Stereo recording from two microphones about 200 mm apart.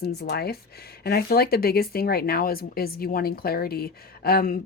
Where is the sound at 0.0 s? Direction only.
50° left (ahead or behind).